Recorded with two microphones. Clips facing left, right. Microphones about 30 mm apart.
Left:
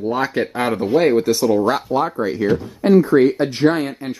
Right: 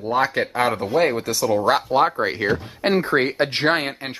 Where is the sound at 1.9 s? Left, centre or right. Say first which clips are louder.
Even; right.